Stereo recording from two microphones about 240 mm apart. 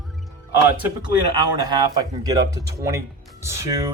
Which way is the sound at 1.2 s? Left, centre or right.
Centre.